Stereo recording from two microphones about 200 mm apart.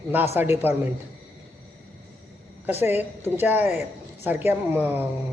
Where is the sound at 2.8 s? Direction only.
10° right (ahead or behind).